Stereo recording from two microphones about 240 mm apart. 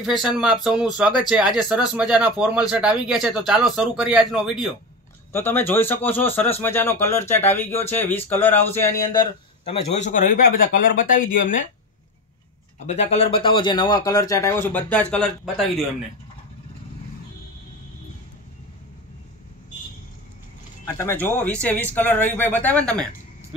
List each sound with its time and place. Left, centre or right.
0.0 s speech: centre
5.3 s speech: centre; by 11.6 s left
12.7 s speech: left; by 15.8 s centre
21.0 s speech: centre